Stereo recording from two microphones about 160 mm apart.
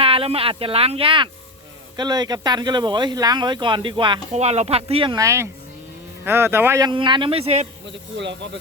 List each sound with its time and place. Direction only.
0.0 s speech: 35° right (ahead or behind)
4.4 s speech: 40° right (ahead or behind)
5.1 s speech: 20° right (ahead or behind)
6.9 s speech: 30° right (ahead or behind)
7.9 s speech: 90° right